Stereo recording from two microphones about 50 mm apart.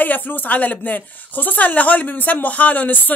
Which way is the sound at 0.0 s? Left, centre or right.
Left.